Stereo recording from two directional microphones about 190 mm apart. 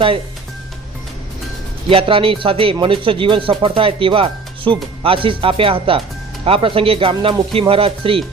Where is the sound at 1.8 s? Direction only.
30° right (ahead or behind).